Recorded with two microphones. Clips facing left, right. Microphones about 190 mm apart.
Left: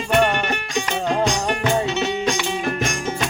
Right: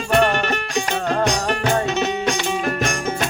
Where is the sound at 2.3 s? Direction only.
55° right (ahead or behind).